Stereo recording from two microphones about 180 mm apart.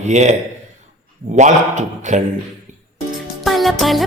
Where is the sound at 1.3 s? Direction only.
40° right (ahead or behind).